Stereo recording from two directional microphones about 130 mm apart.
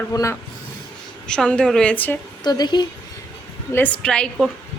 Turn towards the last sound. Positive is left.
turn(degrees=5)  # may be behind; listen again after turning